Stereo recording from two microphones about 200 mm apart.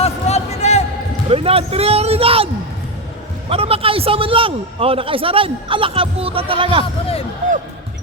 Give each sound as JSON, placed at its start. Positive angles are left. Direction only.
{"t": 0.0, "sound": "music", "side_deg": 35}
{"t": 1.3, "sound": "a man's voice", "side_deg": -30}
{"t": 3.5, "sound": "a man's voice", "side_deg": -30}